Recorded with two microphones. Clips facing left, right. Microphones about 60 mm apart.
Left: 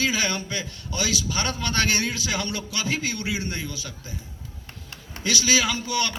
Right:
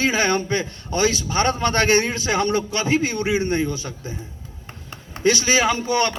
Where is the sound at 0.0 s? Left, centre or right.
Right.